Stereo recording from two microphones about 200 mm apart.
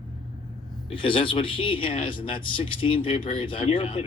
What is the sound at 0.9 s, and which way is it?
A man's voice, 25° left (ahead or behind).